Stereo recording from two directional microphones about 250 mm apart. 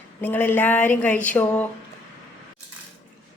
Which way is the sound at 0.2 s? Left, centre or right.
Centre.